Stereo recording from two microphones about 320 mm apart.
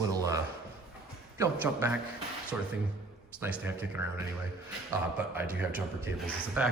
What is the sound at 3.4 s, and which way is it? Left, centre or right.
Speech, centre.